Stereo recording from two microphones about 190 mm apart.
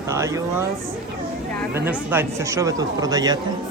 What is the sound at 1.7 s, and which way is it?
Speech, 10° right (ahead or behind).